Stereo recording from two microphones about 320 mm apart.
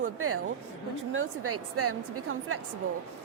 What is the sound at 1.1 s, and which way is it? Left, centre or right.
A woman's voice, right.